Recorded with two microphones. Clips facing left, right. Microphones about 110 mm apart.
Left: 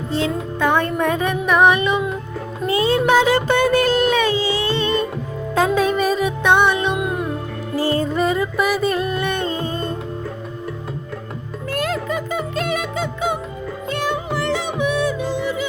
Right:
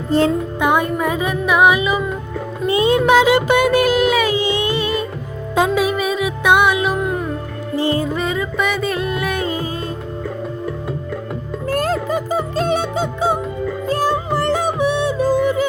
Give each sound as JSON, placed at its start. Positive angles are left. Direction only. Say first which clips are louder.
{"t": 0.6, "sound": "a woman's voice", "louder": "even", "side_deg": -15}
{"t": 2.6, "sound": "music", "louder": "right 2 dB", "side_deg": -20}
{"t": 7.8, "sound": "music", "louder": "right 1 dB", "side_deg": -20}
{"t": 8.1, "sound": "music", "louder": "left 2 dB", "side_deg": 0}
{"t": 11.7, "sound": "music", "louder": "right 4 dB", "side_deg": -35}
{"t": 15.3, "sound": "music", "louder": "right 7 dB", "side_deg": -45}